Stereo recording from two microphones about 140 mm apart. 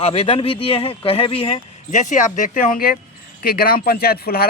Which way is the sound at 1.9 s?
65° left (ahead or behind).